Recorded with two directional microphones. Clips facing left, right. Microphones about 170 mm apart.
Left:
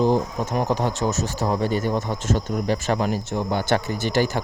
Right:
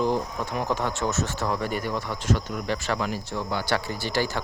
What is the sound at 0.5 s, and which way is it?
Speech, 40° left (ahead or behind).